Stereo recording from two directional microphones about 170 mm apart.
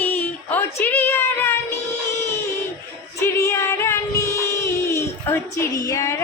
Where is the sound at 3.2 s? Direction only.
15° left (ahead or behind).